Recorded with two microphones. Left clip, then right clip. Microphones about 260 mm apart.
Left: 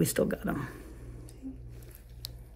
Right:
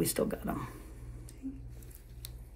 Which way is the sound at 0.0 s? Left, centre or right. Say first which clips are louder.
Left 3 dB; left.